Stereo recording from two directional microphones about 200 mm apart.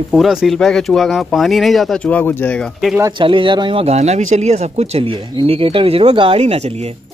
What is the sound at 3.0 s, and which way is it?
Speech, 20° right (ahead or behind).